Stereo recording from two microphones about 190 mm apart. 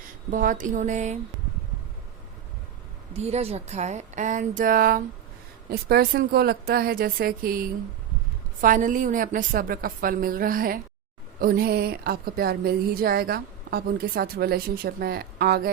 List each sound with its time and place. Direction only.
0.3 s speech: 45° right (ahead or behind)
3.2 s speech: 35° right (ahead or behind); by 15.7 s 55° right (ahead or behind)